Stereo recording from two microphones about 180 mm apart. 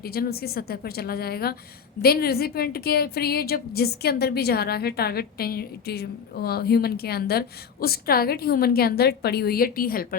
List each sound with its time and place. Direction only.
0.0 s a woman's voice: 60° left (ahead or behind)